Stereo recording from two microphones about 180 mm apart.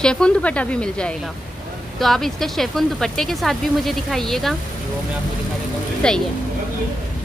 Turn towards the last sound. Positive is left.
turn(degrees=5)  # may be behind; listen again after turning